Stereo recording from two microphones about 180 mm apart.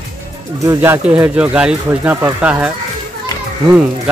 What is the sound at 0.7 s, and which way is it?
Speech, 10° right (ahead or behind).